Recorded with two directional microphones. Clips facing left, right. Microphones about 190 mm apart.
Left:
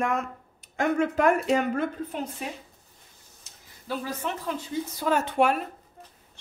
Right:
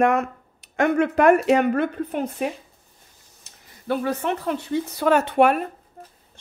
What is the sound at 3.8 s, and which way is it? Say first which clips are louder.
Speech: right 8 dB; 60° right (ahead or behind).